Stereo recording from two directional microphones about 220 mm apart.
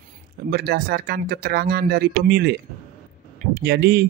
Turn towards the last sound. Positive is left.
turn(degrees=-50)  # may be behind; listen again after turning